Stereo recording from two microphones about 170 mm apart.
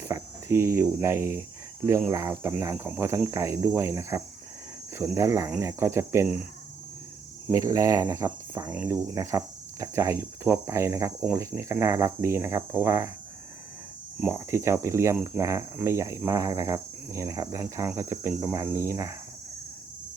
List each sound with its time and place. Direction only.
0.0 s speech: 15° right (ahead or behind)
7.4 s speech: 20° right (ahead or behind)
8.6 s speech: 10° right (ahead or behind)
14.2 s speech: 15° right (ahead or behind)